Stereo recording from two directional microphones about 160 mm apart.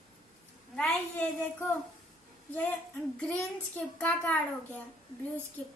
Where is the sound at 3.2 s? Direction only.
10° left (ahead or behind).